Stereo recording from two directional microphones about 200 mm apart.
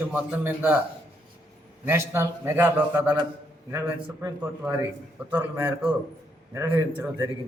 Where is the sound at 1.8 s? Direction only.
10° right (ahead or behind).